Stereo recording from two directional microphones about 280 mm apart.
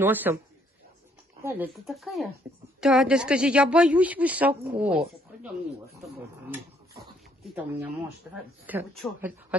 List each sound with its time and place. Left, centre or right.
0.0 s a man's voice: centre
1.4 s a woman's voice: centre
6.5 s a sound: centre
8.3 s a woman's voice: centre